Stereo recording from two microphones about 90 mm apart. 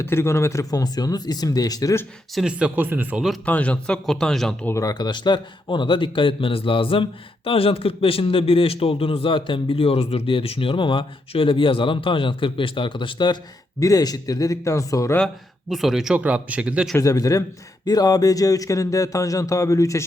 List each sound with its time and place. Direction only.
0.0 s speech: 30° left (ahead or behind); by 2.0 s 45° left (ahead or behind)
2.5 s speech: 15° right (ahead or behind)
3.4 s speech: 15° left (ahead or behind)
4.7 s a man's voice: 40° left (ahead or behind); by 13.4 s 55° left (ahead or behind)
13.7 s speech: 40° left (ahead or behind)
15.7 s speech: centre (ahead or behind)
16.1 s speech: 15° right (ahead or behind)
17.0 s speech: 40° left (ahead or behind)